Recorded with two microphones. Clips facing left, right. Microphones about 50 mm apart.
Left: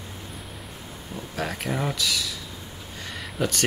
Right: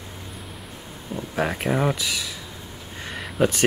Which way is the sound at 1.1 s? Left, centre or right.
Right.